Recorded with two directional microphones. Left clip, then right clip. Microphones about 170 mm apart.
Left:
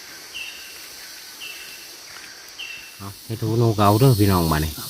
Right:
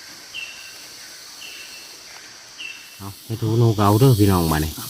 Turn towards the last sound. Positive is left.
turn(degrees=0)  # may be behind; listen again after turning